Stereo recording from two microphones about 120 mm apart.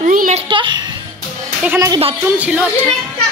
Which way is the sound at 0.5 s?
40° right (ahead or behind).